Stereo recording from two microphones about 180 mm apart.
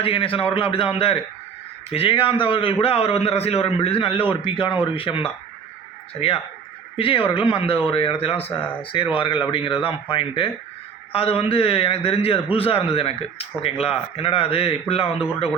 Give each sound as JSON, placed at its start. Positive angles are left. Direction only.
{"t": 0.0, "sound": "a man's voice", "side_deg": 30}